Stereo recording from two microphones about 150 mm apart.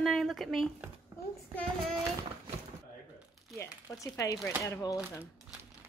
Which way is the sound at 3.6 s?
20° left (ahead or behind).